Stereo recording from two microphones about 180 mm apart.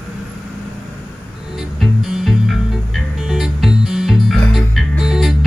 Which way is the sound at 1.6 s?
Centre (ahead or behind).